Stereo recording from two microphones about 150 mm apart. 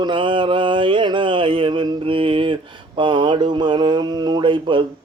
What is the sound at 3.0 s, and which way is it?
Speech, 30° right (ahead or behind).